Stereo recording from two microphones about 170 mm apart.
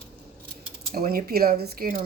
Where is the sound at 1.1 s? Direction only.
60° right (ahead or behind).